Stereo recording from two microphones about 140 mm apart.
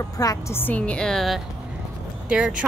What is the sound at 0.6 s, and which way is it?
A woman's voice, 10° left (ahead or behind).